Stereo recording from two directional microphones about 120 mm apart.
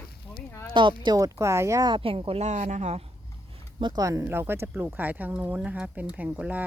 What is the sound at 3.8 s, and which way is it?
Speech, 40° right (ahead or behind).